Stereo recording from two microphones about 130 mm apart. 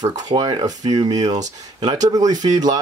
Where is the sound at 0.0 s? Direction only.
35° right (ahead or behind).